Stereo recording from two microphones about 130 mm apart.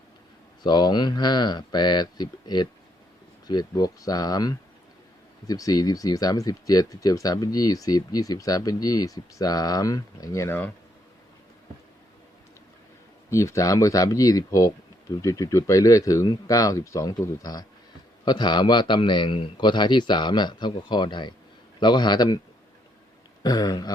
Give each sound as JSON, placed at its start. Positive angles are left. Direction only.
{"t": 0.6, "sound": "a man's voice", "side_deg": 35}
{"t": 13.3, "sound": "a man's voice", "side_deg": 25}
{"t": 23.4, "sound": "a man's voice", "side_deg": 30}